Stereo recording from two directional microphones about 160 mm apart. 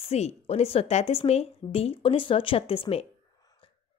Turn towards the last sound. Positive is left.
turn(degrees=35)  # may be behind; listen again after turning